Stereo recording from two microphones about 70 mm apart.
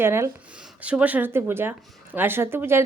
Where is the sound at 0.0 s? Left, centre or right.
Right.